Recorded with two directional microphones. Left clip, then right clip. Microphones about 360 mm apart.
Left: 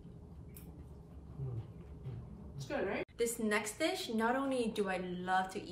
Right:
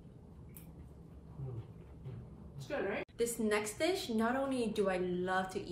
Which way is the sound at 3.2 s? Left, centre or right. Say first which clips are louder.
Right 1 dB; centre.